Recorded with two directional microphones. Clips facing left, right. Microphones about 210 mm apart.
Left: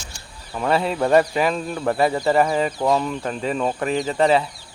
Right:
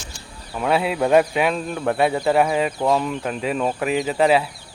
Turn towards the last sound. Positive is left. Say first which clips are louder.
# even
turn(degrees=-5)  # may be behind; listen again after turning